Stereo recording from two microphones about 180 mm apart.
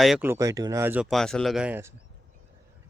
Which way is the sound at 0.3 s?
20° right (ahead or behind).